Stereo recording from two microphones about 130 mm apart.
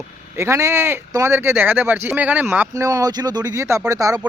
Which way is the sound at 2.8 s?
25° right (ahead or behind).